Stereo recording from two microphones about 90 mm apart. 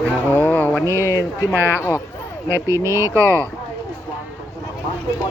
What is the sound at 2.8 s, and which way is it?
Speech, 35° right (ahead or behind).